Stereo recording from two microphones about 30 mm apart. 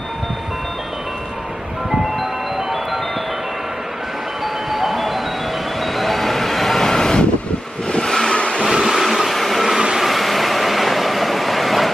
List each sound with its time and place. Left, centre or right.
4.6 s music: centre
5.8 s vehicle: centre
8.3 s vehicle: left
8.6 s train: centre
9.9 s vehicle: centre